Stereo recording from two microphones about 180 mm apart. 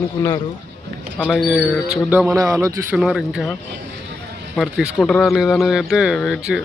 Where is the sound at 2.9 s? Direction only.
5° right (ahead or behind).